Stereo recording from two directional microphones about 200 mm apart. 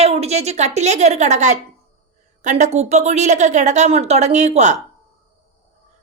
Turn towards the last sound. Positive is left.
turn(degrees=-35)  # may be behind; listen again after turning